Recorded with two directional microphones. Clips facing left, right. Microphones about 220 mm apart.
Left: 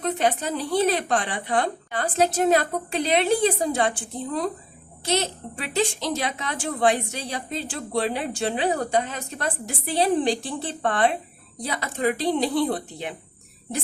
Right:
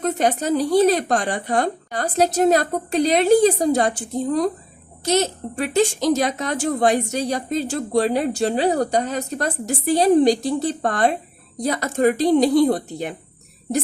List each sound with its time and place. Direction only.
0.0 s a woman's voice: 45° right (ahead or behind)